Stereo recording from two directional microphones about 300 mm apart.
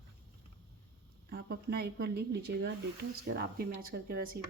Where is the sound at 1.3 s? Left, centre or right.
Right.